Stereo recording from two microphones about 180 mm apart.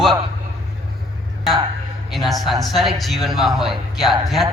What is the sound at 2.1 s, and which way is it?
A man's voice, centre (ahead or behind).